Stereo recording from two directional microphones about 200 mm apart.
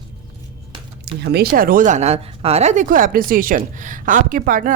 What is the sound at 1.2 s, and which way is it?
Speech, 55° right (ahead or behind).